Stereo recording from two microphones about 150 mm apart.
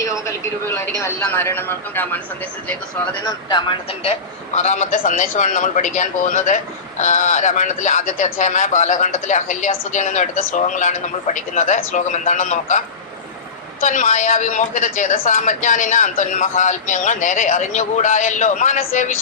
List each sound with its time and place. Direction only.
0.0 s speech: 20° left (ahead or behind)
3.2 s speech: 30° left (ahead or behind)
4.0 s a man's voice: 45° left (ahead or behind)
13.8 s a man's voice: 55° left (ahead or behind)